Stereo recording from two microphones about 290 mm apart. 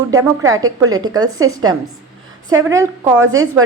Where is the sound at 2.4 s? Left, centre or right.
Centre.